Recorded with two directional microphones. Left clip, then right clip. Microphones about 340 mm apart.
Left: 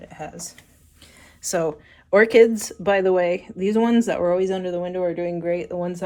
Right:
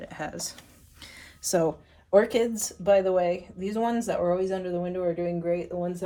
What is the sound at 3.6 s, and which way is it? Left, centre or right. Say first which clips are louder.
Speech: left 7 dB; centre.